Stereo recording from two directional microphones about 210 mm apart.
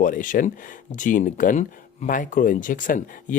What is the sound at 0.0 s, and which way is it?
Speech, 40° left (ahead or behind).